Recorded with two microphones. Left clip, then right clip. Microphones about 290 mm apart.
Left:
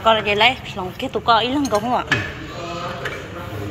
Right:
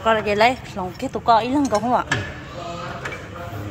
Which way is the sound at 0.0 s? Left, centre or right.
Centre.